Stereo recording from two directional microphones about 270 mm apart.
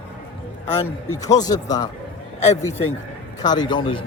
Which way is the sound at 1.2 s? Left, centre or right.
Centre.